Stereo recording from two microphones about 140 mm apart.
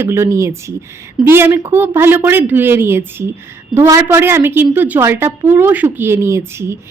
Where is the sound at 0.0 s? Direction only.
20° right (ahead or behind).